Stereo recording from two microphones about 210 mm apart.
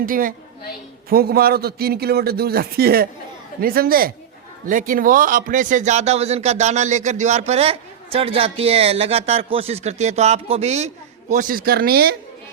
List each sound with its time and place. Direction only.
0.0 s a man's voice: 40° right (ahead or behind)